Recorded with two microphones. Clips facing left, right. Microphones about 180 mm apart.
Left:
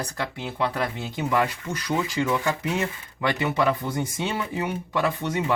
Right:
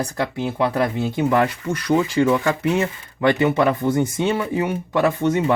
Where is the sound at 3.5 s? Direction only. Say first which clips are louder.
Right 6 dB; 50° right (ahead or behind).